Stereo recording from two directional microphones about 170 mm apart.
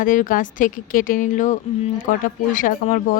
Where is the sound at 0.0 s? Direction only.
55° left (ahead or behind).